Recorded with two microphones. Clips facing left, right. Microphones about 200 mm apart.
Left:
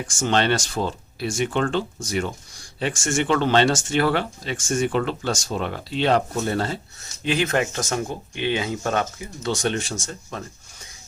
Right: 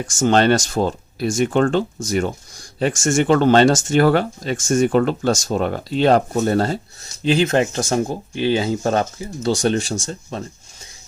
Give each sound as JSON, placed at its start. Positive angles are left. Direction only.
{"t": 0.1, "sound": "speech", "side_deg": -40}